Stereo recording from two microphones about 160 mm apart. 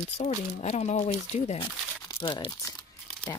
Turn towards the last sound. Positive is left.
turn(degrees=25)  # may be behind; listen again after turning